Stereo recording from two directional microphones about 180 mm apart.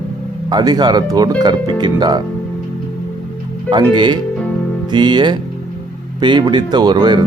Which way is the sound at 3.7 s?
25° right (ahead or behind).